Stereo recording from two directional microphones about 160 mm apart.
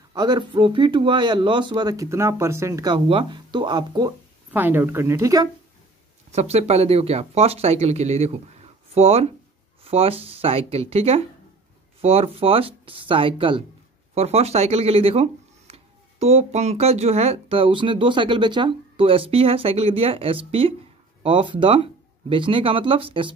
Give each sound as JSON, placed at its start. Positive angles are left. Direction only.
{"t": 0.1, "sound": "speech", "side_deg": -25}
{"t": 4.5, "sound": "speech", "side_deg": -10}
{"t": 6.3, "sound": "speech", "side_deg": -40}